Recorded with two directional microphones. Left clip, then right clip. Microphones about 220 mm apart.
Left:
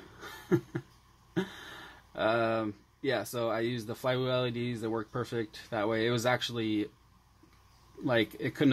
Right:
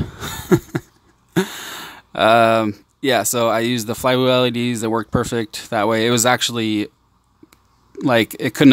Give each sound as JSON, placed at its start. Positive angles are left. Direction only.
{"t": 0.2, "sound": "a sound", "side_deg": -40}
{"t": 1.3, "sound": "speech", "side_deg": -40}
{"t": 8.0, "sound": "speech", "side_deg": -40}